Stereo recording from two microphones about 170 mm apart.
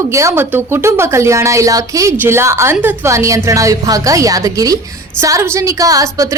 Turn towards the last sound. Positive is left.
turn(degrees=-20)  # may be behind; listen again after turning